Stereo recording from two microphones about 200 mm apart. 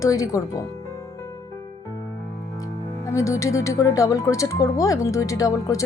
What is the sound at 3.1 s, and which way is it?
Speech, 15° left (ahead or behind).